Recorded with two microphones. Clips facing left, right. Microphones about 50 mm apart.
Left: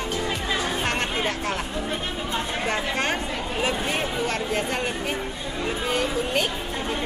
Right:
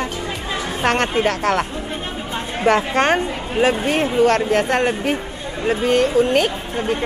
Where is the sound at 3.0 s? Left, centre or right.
Right.